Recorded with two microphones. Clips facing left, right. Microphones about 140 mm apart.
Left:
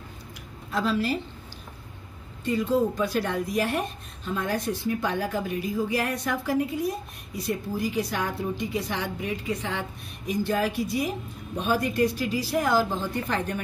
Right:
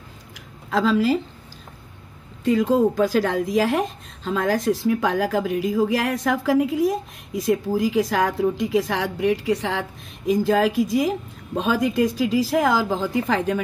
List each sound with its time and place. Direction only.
0.7 s a woman's voice: 90° right
2.4 s a woman's voice: 90° right